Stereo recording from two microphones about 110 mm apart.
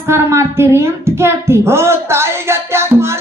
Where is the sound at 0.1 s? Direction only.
25° right (ahead or behind).